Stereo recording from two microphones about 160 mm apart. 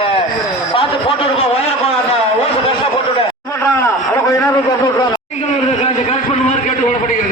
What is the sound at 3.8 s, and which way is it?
Speech, 15° left (ahead or behind).